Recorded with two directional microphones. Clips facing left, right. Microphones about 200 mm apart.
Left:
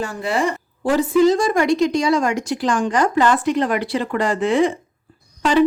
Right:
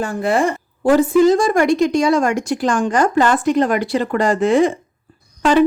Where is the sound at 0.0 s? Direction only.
50° right (ahead or behind).